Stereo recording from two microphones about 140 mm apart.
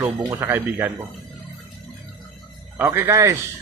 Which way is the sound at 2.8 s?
20° right (ahead or behind).